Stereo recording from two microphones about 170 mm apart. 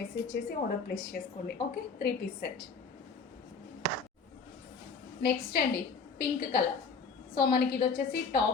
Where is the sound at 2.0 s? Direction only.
65° left (ahead or behind).